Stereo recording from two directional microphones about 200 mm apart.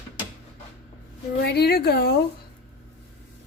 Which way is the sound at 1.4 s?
55° left (ahead or behind).